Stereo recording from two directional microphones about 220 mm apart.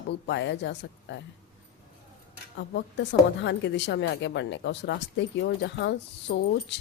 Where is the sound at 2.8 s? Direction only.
55° left (ahead or behind).